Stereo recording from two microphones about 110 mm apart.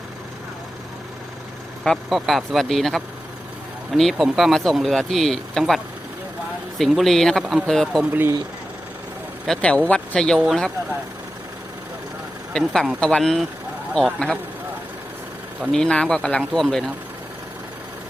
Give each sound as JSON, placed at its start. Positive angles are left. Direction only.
{"t": 1.8, "sound": "speech", "side_deg": 5}
{"t": 9.5, "sound": "speech", "side_deg": 10}
{"t": 12.5, "sound": "speech", "side_deg": 0}
{"t": 15.7, "sound": "speech", "side_deg": 10}